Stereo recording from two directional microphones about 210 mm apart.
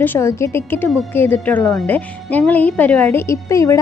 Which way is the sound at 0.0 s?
10° left (ahead or behind).